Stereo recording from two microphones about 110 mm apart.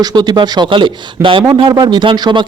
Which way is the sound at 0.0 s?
40° right (ahead or behind).